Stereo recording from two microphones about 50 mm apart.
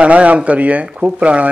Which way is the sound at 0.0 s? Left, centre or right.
Right.